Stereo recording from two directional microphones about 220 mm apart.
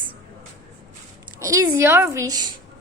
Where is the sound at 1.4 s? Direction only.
15° right (ahead or behind).